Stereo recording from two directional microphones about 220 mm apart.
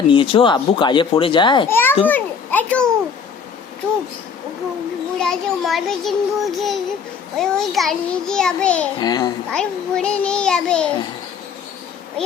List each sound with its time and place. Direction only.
0.1 s speech: 25° left (ahead or behind)
1.7 s a child's voice: 10° left (ahead or behind)
2.0 s children playing: 10° left (ahead or behind)
5.2 s child singing: centre (ahead or behind)
9.0 s a child's voice: 20° left (ahead or behind)
9.5 s child singing: 5° left (ahead or behind)